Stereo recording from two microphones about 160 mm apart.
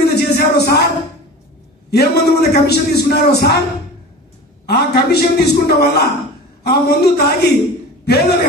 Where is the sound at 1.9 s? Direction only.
85° left.